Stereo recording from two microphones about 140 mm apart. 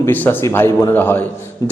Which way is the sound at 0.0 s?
15° left (ahead or behind).